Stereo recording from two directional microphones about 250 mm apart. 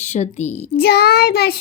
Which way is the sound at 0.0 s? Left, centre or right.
Left.